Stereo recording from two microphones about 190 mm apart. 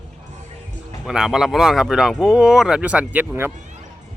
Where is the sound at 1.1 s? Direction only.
5° right (ahead or behind).